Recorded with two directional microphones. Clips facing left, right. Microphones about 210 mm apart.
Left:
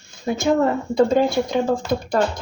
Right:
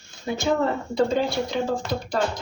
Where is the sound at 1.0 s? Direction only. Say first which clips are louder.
Left 5 dB; 50° left (ahead or behind).